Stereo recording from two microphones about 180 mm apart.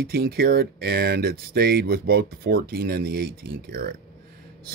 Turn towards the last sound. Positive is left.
turn(degrees=-55)  # may be behind; listen again after turning